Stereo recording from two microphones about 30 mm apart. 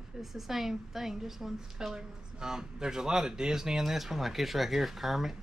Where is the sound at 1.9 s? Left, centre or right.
Right.